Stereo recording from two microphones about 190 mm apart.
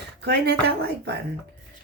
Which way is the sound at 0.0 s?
60° right (ahead or behind).